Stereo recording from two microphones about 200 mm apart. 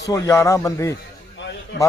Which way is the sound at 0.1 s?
15° left (ahead or behind).